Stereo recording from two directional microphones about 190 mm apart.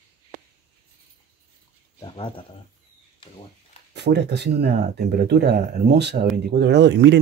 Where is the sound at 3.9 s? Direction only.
60° right (ahead or behind).